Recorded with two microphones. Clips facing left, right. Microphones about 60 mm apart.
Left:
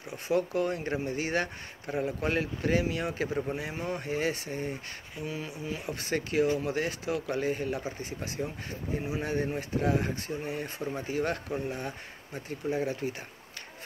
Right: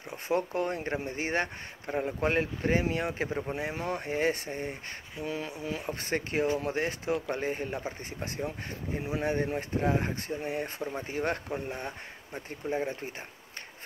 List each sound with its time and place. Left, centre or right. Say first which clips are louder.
0.4 s speech: left 1 dB; right
11.1 s speech: left 1 dB; right